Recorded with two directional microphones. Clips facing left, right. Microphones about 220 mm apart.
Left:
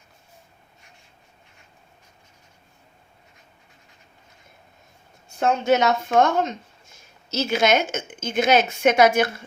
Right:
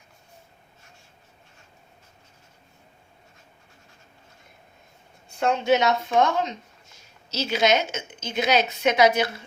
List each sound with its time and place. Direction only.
5.4 s a woman's voice: 45° left (ahead or behind)